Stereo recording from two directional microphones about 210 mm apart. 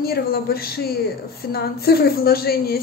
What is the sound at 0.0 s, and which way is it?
A woman's voice, 45° left (ahead or behind).